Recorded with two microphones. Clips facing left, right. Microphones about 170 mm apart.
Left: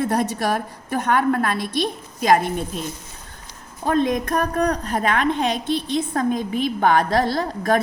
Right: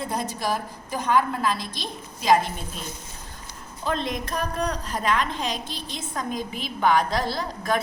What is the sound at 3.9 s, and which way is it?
A woman's voice, 55° left (ahead or behind).